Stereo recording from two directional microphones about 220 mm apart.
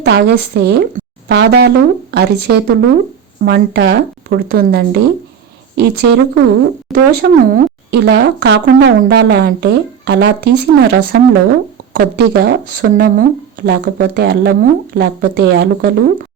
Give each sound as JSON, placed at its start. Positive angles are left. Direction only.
{"t": 0.0, "sound": "speech", "side_deg": -50}